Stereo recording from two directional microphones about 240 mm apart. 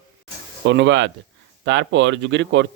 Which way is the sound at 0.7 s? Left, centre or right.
Right.